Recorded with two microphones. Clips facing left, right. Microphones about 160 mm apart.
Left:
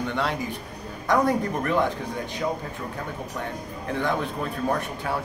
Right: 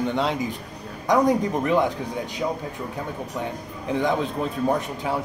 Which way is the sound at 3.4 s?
15° right (ahead or behind).